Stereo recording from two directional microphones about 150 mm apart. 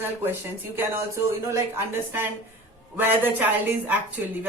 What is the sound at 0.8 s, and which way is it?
Speech, 20° right (ahead or behind).